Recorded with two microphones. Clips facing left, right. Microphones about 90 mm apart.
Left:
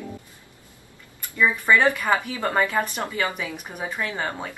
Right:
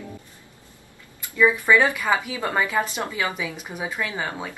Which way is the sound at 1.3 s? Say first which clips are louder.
Right 2 dB; 15° right (ahead or behind).